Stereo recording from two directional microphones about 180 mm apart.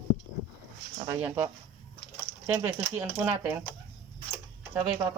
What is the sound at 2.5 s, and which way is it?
Speech, 10° right (ahead or behind).